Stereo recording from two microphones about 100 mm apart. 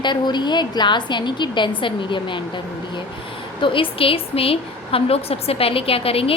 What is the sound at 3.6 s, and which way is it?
A woman's voice, 60° left (ahead or behind).